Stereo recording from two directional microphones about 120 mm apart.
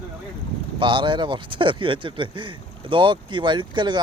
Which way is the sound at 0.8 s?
40° right (ahead or behind).